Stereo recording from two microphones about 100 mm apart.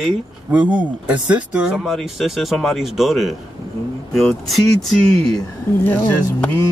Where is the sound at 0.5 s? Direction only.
15° right (ahead or behind); by 5.4 s 5° left (ahead or behind).